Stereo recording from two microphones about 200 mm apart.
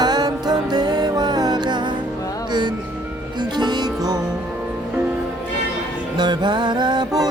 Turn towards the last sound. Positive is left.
turn(degrees=-20)  # may be behind; listen again after turning